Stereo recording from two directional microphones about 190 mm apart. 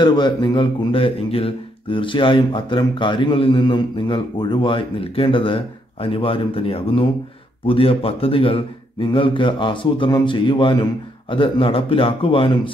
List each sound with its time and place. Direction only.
0.0 s speech: 25° left (ahead or behind)